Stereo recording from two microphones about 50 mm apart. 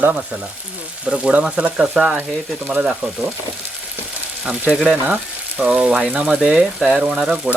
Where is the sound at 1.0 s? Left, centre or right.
Centre.